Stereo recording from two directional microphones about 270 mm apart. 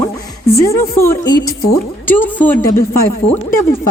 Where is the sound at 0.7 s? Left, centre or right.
Centre.